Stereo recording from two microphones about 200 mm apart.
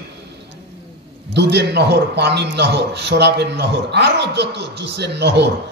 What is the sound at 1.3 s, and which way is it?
A man's voice, 60° right (ahead or behind).